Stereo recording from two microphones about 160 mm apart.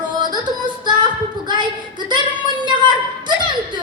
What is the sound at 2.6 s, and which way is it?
Speech, 30° right (ahead or behind).